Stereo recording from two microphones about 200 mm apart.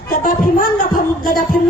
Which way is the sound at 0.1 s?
45° left (ahead or behind).